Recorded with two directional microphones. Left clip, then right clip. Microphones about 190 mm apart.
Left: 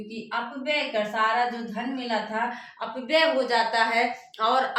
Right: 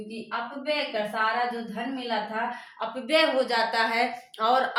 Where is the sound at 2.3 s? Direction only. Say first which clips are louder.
Left 2 dB; 20° right (ahead or behind).